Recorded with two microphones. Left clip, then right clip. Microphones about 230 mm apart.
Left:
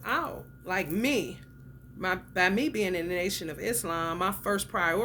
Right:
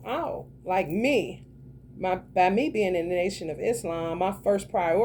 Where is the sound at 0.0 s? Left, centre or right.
Left.